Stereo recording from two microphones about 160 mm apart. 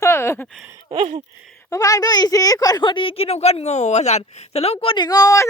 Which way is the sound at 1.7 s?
20° left (ahead or behind).